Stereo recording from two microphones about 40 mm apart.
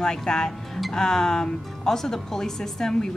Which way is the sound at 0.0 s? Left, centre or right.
Centre.